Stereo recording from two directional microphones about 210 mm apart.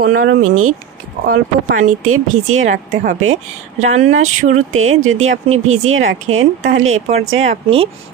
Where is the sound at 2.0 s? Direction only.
90° right.